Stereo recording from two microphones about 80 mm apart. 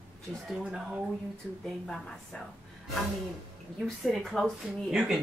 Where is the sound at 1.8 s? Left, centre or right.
Centre.